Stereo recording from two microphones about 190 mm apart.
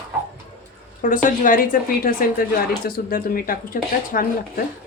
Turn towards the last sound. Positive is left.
turn(degrees=50)  # may be behind; listen again after turning